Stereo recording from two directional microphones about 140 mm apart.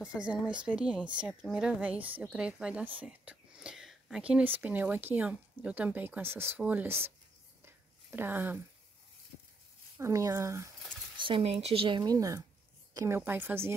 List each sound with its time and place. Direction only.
0.0 s speech: 10° right (ahead or behind)
7.6 s a sound: 15° right (ahead or behind)
9.9 s speech: 20° right (ahead or behind)
11.1 s speech: 35° right (ahead or behind)
12.0 s speech: 25° right (ahead or behind)